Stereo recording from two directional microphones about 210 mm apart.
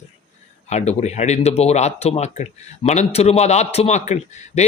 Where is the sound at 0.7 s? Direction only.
30° left (ahead or behind).